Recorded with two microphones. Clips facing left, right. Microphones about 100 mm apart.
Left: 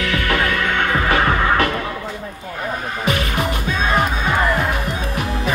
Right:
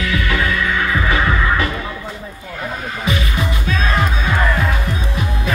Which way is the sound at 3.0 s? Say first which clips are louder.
Left 1 dB; 55° left (ahead or behind).